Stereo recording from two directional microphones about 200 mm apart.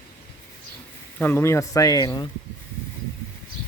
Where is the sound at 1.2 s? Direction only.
10° left (ahead or behind).